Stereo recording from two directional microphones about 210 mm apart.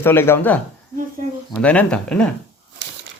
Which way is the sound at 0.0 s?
10° left (ahead or behind).